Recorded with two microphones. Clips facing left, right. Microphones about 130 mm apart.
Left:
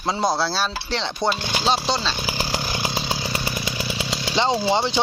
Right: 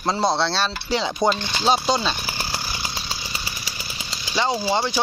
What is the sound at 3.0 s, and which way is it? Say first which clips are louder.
Chainsaw: left 7 dB; 75° left (ahead or behind).